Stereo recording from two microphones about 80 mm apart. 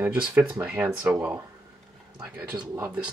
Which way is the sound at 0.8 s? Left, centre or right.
Centre.